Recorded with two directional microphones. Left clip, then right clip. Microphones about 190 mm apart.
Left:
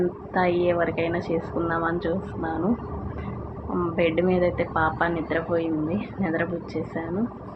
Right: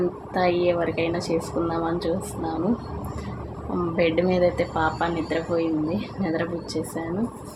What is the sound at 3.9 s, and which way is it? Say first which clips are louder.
A woman's voice: right 1 dB; 25° right (ahead or behind).